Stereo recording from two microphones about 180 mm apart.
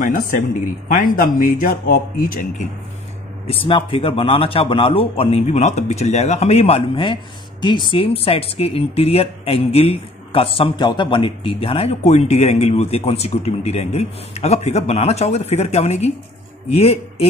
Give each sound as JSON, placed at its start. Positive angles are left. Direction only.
{"t": 0.8, "sound": "a man's voice", "side_deg": 50}
{"t": 3.4, "sound": "speech", "side_deg": 30}